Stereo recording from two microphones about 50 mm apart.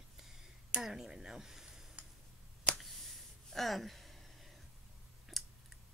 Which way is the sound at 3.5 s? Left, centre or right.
Centre.